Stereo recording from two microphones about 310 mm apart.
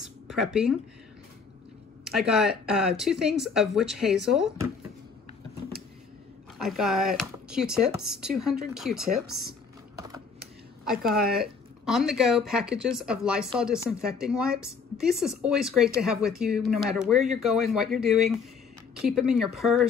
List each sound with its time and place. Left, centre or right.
0.0 s a sound: centre
2.0 s speech: centre
6.6 s speech: centre
11.1 s speech: centre